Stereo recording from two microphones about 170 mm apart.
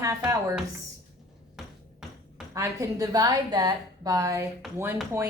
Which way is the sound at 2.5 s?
20° right (ahead or behind).